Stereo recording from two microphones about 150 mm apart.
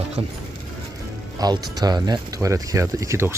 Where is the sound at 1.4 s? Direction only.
25° right (ahead or behind).